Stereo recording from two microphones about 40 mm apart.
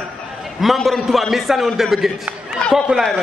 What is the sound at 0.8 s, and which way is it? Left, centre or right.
A man's voice, centre.